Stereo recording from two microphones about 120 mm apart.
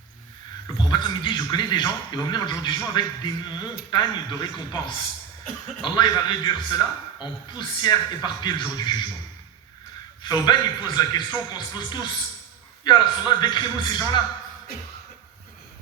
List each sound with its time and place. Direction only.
0.8 s a man's voice: 40° left (ahead or behind)
10.2 s a man's voice: 35° left (ahead or behind)